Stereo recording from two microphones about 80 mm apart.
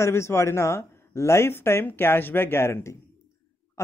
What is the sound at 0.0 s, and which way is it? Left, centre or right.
Speech, left.